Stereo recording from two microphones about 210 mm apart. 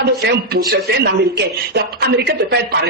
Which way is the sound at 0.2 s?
55° right (ahead or behind).